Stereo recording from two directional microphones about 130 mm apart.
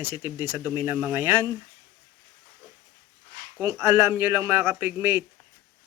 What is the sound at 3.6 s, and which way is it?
Speech, 20° right (ahead or behind).